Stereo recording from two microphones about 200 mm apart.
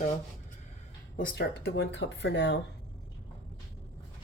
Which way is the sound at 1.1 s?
50° left (ahead or behind).